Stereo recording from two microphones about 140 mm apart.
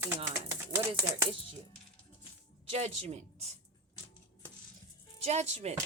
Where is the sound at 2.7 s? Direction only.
50° right (ahead or behind).